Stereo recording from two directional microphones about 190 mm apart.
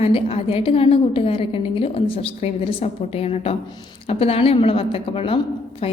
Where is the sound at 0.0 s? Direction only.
30° left (ahead or behind).